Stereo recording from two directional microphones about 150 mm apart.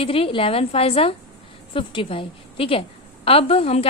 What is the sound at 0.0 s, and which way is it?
A woman's voice, 40° left (ahead or behind).